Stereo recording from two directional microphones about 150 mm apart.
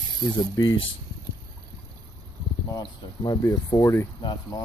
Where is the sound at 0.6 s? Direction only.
25° left (ahead or behind).